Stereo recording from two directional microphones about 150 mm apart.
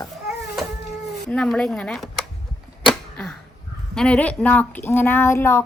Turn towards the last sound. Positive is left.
turn(degrees=15)  # may be behind; listen again after turning